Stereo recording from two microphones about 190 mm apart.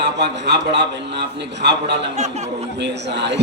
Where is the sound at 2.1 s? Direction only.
35° right (ahead or behind).